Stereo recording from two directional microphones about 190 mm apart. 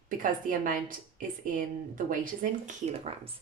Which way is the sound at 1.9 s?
45° right (ahead or behind).